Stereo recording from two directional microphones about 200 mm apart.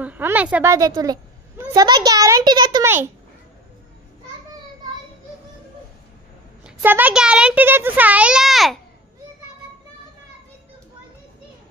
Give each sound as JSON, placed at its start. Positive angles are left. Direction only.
{"t": 0.0, "sound": "a child's voice", "side_deg": -10}
{"t": 6.6, "sound": "a child's voice", "side_deg": -10}